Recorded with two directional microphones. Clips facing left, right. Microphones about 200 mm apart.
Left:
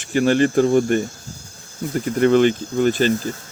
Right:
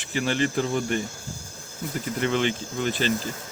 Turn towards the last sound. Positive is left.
turn(degrees=45)  # may be behind; listen again after turning